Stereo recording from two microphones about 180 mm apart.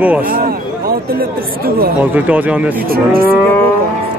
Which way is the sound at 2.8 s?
55° right (ahead or behind).